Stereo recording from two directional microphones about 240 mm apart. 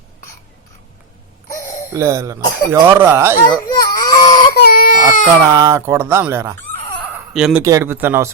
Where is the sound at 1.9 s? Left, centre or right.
Centre.